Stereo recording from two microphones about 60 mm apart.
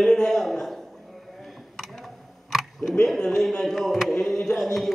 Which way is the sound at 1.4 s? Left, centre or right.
Centre.